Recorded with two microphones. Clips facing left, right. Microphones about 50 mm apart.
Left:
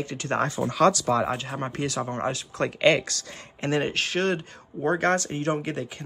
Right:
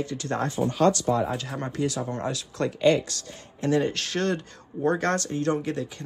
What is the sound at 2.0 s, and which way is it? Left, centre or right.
Speech, left.